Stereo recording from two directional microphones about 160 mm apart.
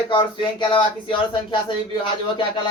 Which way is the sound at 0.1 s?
30° left (ahead or behind).